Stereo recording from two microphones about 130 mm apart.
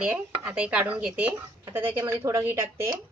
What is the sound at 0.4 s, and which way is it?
A woman's voice, 10° right (ahead or behind).